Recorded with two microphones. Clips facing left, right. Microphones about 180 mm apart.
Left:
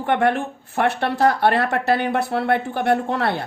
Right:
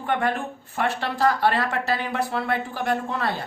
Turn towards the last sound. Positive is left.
turn(degrees=65)  # may be behind; listen again after turning